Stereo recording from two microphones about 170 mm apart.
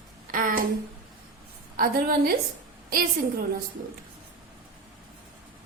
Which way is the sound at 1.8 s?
60° right (ahead or behind).